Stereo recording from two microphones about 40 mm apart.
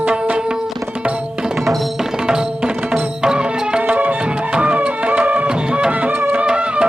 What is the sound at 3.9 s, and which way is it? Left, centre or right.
Music, right.